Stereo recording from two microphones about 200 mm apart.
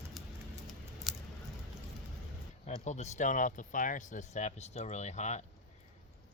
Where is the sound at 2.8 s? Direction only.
35° left (ahead or behind).